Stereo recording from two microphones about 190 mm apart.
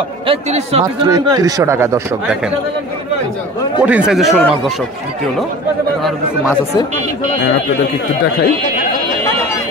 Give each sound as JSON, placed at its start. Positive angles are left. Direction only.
{"t": 0.3, "sound": "speech", "side_deg": -30}
{"t": 1.0, "sound": "speech", "side_deg": -20}
{"t": 3.8, "sound": "speech", "side_deg": -5}